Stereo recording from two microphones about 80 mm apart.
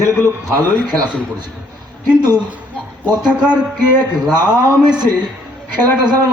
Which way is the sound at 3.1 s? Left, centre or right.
Right.